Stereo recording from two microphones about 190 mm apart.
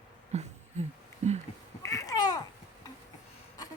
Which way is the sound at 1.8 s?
15° left (ahead or behind).